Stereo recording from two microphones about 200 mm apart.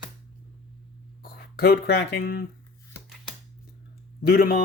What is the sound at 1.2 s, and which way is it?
Speech, 50° left (ahead or behind).